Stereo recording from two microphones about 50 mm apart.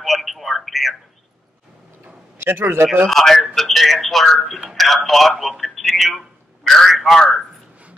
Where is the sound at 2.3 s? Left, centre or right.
Right.